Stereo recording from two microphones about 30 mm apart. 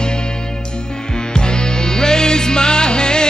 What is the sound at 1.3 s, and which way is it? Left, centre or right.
Music, left.